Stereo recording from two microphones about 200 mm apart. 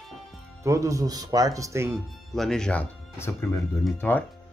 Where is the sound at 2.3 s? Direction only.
Centre (ahead or behind).